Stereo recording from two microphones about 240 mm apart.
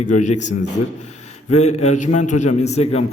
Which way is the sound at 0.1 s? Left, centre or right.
Left.